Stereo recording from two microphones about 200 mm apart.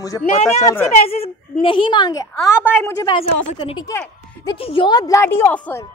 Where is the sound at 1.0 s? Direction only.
30° left (ahead or behind); by 5.8 s 10° left (ahead or behind).